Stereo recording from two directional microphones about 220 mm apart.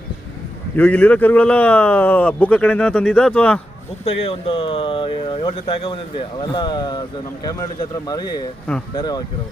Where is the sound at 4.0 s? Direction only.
25° left (ahead or behind).